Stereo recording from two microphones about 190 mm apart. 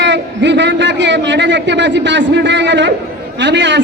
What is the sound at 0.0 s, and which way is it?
A man's voice, 70° right (ahead or behind).